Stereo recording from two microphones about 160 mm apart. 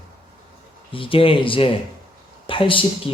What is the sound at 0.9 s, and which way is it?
Speech, 35° left (ahead or behind).